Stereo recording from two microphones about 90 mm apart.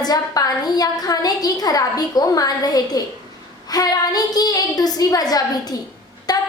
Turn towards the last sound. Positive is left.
turn(degrees=45)  # may be behind; listen again after turning